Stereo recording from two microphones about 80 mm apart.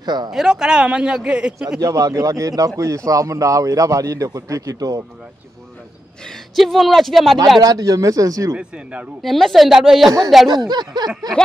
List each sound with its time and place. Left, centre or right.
0.0 s speech: right
0.3 s a man's voice: centre
1.8 s speech: right
6.2 s speech: centre
7.6 s speech: right
8.5 s a man's voice: centre
9.2 s a man's voice: centre
10.5 s speech: right
11.1 s speech: centre